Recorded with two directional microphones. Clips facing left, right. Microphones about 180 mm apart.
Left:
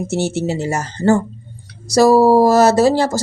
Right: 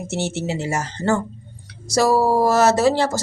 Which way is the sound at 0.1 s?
40° left (ahead or behind).